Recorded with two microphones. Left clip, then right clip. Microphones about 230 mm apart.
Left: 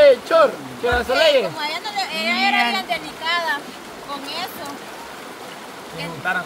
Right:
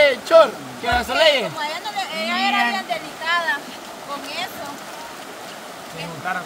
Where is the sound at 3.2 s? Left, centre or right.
Centre.